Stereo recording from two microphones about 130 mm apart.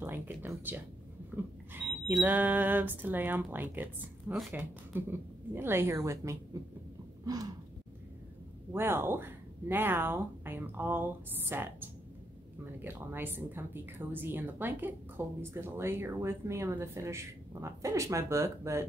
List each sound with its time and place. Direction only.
0.0 s speech: 15° right (ahead or behind)
1.3 s smoke detector: 15° right (ahead or behind)
2.2 s a woman's voice: 15° right (ahead or behind)
8.7 s a woman's voice: 15° right (ahead or behind)